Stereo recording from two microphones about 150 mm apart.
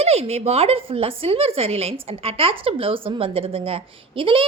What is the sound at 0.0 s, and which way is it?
Speech, 45° right (ahead or behind).